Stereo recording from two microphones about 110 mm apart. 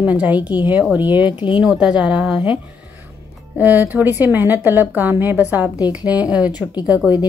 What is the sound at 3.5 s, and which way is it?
A woman's voice, 15° right (ahead or behind).